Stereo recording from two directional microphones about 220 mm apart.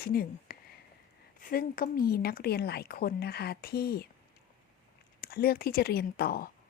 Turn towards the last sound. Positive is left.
turn(degrees=45)  # may be behind; listen again after turning